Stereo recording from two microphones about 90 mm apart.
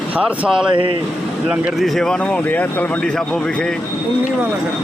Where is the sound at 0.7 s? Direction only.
75° right (ahead or behind).